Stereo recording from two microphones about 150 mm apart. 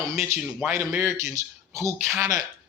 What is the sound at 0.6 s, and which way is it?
A man's voice, 15° right (ahead or behind).